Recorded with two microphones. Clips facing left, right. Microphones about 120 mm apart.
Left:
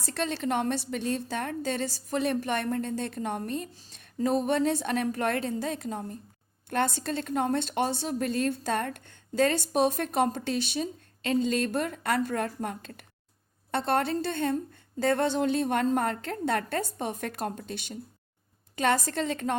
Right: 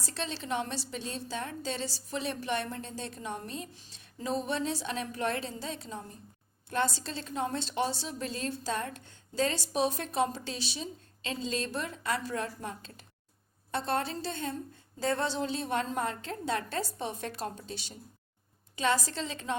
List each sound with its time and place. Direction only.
0.0 s a woman's voice: 55° left (ahead or behind)